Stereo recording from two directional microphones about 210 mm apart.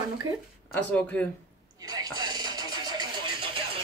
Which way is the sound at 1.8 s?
20° right (ahead or behind).